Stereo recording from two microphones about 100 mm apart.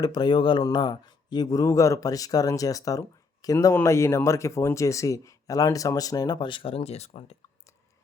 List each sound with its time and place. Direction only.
0.0 s speech: 45° left (ahead or behind); by 7.3 s 85° left